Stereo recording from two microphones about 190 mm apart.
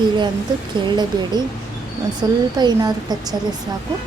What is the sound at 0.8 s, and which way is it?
A woman's voice, 25° right (ahead or behind).